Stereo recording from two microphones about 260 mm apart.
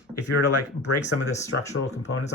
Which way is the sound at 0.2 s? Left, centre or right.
Left.